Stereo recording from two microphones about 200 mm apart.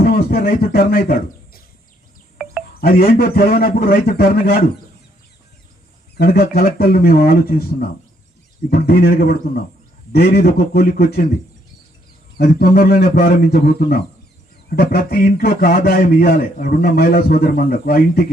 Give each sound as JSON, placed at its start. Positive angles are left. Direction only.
{"t": 0.0, "sound": "a sound", "side_deg": 45}
{"t": 2.8, "sound": "a man's voice", "side_deg": 45}
{"t": 6.1, "sound": "a man's voice", "side_deg": 50}
{"t": 12.4, "sound": "a man's voice", "side_deg": 45}